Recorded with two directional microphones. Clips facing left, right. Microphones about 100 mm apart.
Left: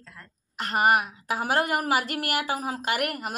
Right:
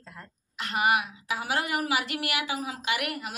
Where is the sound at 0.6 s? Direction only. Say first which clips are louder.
Left 3 dB; 45° left (ahead or behind).